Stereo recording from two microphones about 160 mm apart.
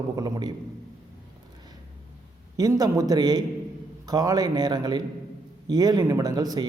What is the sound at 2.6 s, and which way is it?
A man's voice, 20° right (ahead or behind).